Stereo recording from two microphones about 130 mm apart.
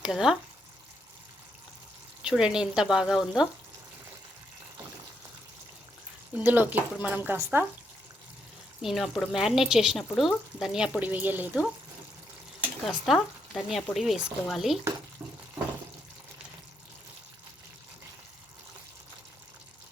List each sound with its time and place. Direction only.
0.0 s speech: 5° right (ahead or behind)
2.2 s speech: 5° right (ahead or behind)
6.3 s speech: 15° right (ahead or behind)
8.8 s speech: centre (ahead or behind)
13.1 s speech: centre (ahead or behind)
15.2 s water: 15° right (ahead or behind)